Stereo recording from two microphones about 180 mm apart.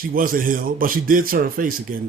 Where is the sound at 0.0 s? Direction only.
50° right (ahead or behind).